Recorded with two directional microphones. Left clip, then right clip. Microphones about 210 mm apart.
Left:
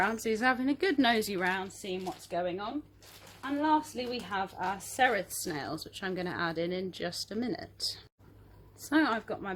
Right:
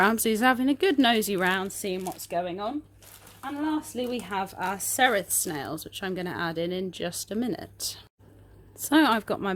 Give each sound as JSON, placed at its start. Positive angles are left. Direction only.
{"t": 0.0, "sound": "a woman's voice", "side_deg": -40}
{"t": 3.9, "sound": "a woman's voice", "side_deg": -50}